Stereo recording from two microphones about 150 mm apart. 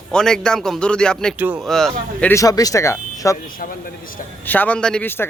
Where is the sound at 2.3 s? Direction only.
20° left (ahead or behind).